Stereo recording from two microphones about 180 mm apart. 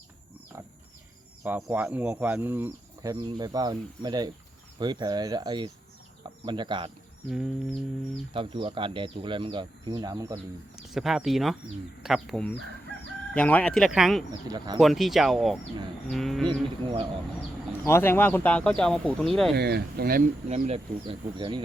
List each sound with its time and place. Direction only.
1.5 s speech: 10° right (ahead or behind); by 6.9 s 25° right (ahead or behind)
7.3 s a sound: centre (ahead or behind)
8.3 s speech: 30° right (ahead or behind)
10.9 s a sound: centre (ahead or behind)
14.4 s speech: 20° right (ahead or behind)
14.8 s a sound: centre (ahead or behind)
16.5 s speech: 25° right (ahead or behind)
17.8 s speech: 15° left (ahead or behind)
19.5 s speech: 65° right (ahead or behind)
20.5 s speech: 35° right (ahead or behind)